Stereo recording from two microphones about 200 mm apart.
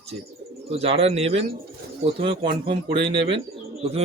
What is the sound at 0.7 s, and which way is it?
Speech, 30° right (ahead or behind).